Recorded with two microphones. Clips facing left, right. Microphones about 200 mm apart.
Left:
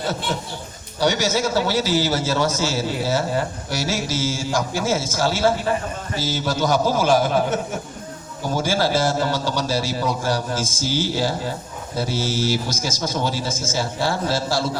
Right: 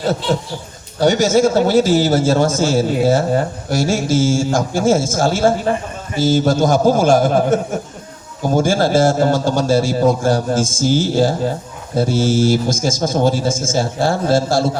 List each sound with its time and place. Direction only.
0.9 s a man's voice: 50° right (ahead or behind)